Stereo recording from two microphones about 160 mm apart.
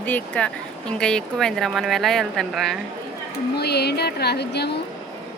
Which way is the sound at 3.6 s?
90° left.